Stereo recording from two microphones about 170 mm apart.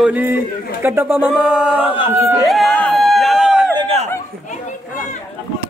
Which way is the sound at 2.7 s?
10° left (ahead or behind).